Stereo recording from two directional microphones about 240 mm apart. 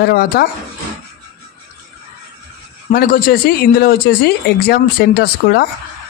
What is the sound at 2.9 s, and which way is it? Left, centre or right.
Speech, left.